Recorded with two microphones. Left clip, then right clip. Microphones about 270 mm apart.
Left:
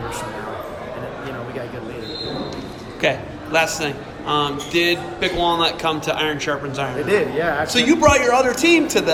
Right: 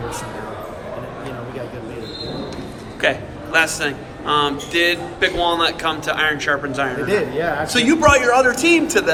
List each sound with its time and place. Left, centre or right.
3.0 s a man's voice: centre
7.1 s a man's voice: centre
7.7 s a man's voice: centre